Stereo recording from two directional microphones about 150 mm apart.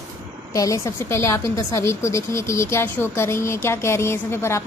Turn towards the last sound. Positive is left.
turn(degrees=15)  # may be behind; listen again after turning